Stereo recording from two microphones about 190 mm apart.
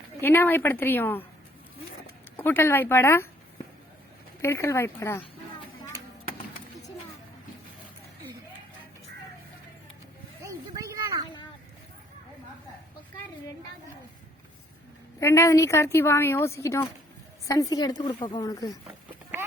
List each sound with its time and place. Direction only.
0.2 s speech: 10° left (ahead or behind)
2.4 s speech: 10° left (ahead or behind)
4.4 s speech: 15° left (ahead or behind)
10.4 s a sound: 15° right (ahead or behind)
15.2 s a woman's voice: 15° left (ahead or behind)
18.9 s a sound: 10° right (ahead or behind)